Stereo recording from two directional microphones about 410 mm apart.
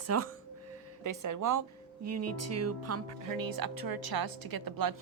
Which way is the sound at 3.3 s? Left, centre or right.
Right.